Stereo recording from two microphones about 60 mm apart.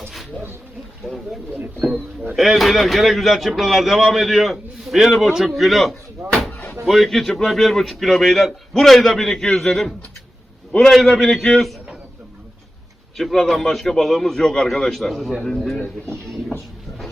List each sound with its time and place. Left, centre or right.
1.0 s speech: centre
6.5 s door: left
6.8 s a man's voice: centre
13.1 s speech: centre